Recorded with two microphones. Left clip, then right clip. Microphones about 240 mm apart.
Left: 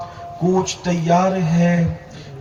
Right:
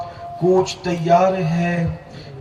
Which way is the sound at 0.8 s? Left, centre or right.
Right.